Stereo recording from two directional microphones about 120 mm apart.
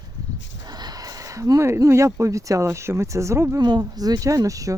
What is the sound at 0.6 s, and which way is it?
Speech, 35° right (ahead or behind).